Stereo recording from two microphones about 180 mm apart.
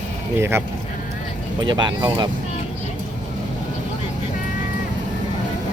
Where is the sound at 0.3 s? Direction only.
15° right (ahead or behind).